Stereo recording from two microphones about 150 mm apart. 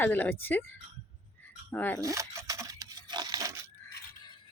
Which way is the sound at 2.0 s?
20° right (ahead or behind).